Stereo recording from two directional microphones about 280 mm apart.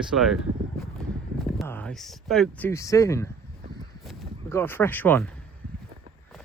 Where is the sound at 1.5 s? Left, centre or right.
Centre.